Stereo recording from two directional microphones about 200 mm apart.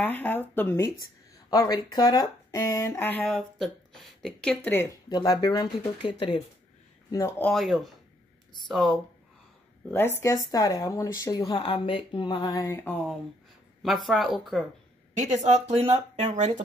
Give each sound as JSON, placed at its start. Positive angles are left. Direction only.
{"t": 0.0, "sound": "speech", "side_deg": 10}
{"t": 4.6, "sound": "speech", "side_deg": 15}
{"t": 15.1, "sound": "speech", "side_deg": -35}